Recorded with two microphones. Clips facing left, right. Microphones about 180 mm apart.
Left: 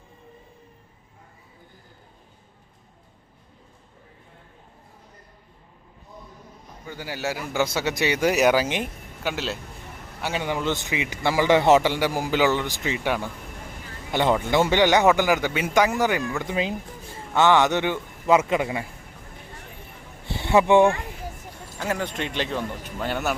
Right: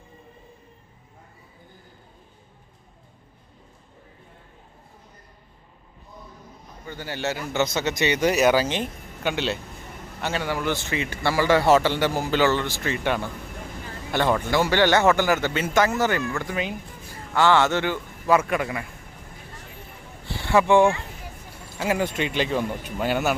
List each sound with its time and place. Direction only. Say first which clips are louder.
6.8 s a man's voice: right 1 dB; 10° left (ahead or behind)
10.2 s a man's voice: even; 15° left (ahead or behind)
16.4 s a man's voice: left 2 dB; 25° left (ahead or behind)
20.2 s vehicle: left 1 dB; 20° left (ahead or behind)
21.8 s speech: right 3 dB; 5° right (ahead or behind)